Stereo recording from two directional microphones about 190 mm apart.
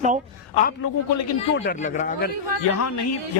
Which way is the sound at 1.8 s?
40° left (ahead or behind).